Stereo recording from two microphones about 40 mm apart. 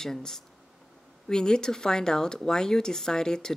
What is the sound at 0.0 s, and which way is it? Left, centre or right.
Speech, centre.